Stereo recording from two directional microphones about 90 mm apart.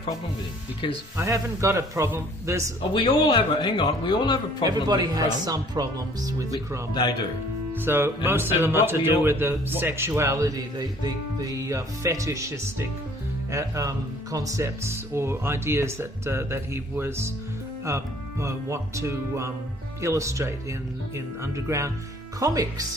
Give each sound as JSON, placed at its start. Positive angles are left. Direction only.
{"t": 1.2, "sound": "speech", "side_deg": -35}
{"t": 2.9, "sound": "a man's voice", "side_deg": 70}
{"t": 4.6, "sound": "speech", "side_deg": -50}
{"t": 7.7, "sound": "speech", "side_deg": -25}